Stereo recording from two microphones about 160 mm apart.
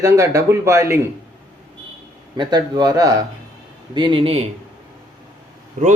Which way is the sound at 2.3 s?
25° right (ahead or behind).